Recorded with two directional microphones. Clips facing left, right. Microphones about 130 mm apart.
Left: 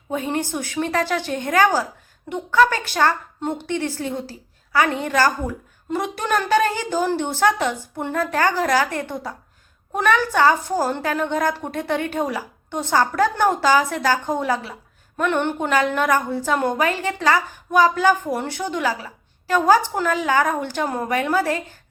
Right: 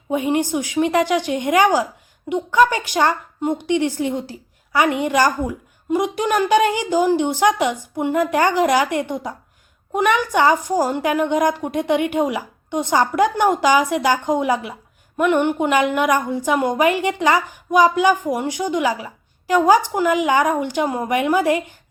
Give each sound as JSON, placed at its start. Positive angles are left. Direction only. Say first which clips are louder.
{"t": 0.1, "sound": "a woman's voice", "louder": "right 5 dB", "side_deg": -15}